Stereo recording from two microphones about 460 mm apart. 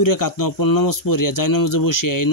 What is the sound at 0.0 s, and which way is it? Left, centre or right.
Speech, left.